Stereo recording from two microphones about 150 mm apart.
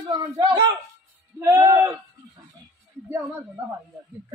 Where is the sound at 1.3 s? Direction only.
20° right (ahead or behind).